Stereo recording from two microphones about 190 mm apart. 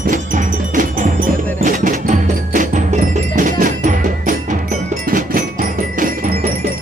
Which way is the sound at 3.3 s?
45° right (ahead or behind).